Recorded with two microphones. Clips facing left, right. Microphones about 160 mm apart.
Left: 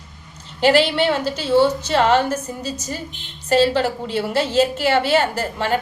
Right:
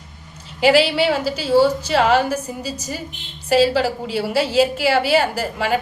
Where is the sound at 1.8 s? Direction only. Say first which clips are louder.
Even; 10° right (ahead or behind).